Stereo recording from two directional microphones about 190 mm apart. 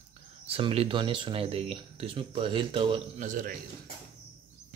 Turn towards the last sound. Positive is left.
turn(degrees=-45)  # may be behind; listen again after turning